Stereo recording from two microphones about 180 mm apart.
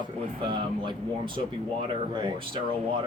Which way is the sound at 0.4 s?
25° right (ahead or behind).